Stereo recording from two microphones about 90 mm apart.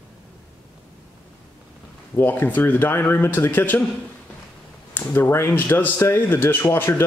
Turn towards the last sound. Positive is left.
turn(degrees=30)  # may be behind; listen again after turning